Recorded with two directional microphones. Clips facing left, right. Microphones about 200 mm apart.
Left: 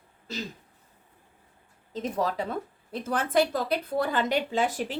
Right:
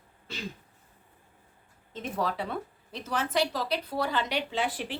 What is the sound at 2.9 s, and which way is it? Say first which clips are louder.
A woman's voice: left 4 dB; 55° left (ahead or behind).